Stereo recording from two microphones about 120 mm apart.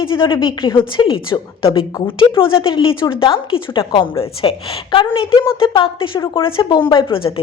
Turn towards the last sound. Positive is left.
turn(degrees=45)  # may be behind; listen again after turning